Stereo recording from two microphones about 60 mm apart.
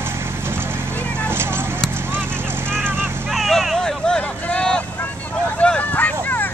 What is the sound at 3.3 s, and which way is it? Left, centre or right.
Vehicle, centre.